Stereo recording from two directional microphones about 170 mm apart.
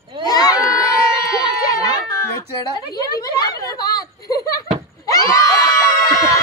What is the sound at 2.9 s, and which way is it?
Speech, 20° left (ahead or behind).